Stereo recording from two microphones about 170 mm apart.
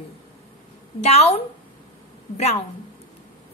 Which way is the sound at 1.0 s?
40° left (ahead or behind).